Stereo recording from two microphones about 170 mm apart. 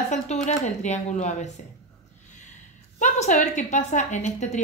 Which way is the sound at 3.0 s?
45° left (ahead or behind).